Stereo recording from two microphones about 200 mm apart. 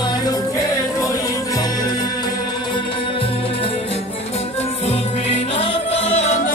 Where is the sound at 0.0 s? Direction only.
20° left (ahead or behind).